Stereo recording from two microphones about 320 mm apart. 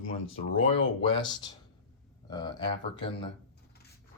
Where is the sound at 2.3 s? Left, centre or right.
Centre.